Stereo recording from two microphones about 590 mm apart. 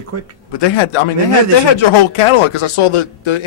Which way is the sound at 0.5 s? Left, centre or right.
Left.